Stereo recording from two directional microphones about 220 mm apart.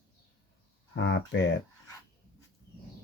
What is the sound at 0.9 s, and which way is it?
Speech, 55° left (ahead or behind).